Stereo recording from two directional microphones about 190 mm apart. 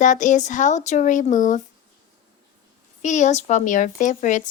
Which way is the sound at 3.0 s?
40° left (ahead or behind).